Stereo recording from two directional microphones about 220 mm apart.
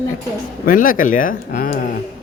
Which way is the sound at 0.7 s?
40° left (ahead or behind).